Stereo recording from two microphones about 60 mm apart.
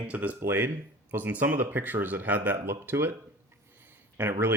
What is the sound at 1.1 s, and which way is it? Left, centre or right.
Speech, right.